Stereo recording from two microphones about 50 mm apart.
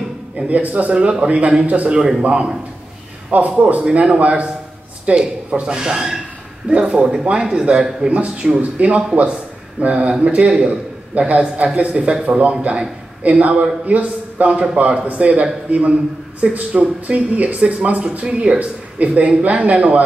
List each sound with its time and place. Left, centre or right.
0.5 s speech: right
0.9 s a man's voice: right
2.0 s a man's voice: centre
6.7 s a man's voice: right